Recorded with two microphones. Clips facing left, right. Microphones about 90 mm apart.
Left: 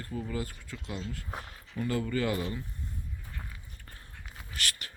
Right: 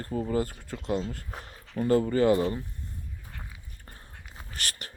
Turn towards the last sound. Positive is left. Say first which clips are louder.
# even
turn(degrees=-35)  # may be behind; listen again after turning